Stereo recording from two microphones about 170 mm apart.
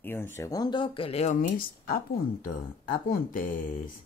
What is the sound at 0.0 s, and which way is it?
Speech, 15° left (ahead or behind).